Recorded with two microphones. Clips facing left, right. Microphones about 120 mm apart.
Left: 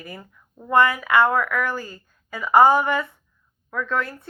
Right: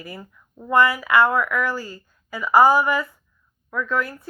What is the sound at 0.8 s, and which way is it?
Speech, 20° left (ahead or behind).